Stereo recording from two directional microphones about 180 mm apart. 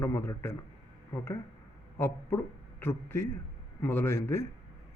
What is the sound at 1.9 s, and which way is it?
Speech, 15° left (ahead or behind).